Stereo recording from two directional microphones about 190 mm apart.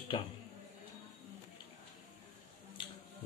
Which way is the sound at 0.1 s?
25° left (ahead or behind).